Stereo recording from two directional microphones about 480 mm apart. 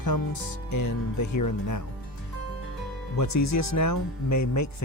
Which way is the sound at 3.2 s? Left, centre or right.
Left.